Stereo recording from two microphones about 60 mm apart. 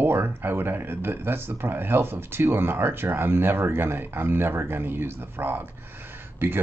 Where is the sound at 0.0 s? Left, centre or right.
Right.